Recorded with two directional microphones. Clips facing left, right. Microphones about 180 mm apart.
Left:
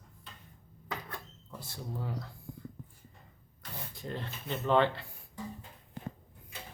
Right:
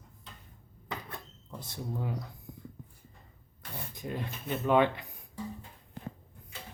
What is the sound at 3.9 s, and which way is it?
Speech, 15° right (ahead or behind).